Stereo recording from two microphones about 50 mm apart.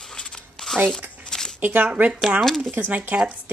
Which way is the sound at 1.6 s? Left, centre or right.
Right.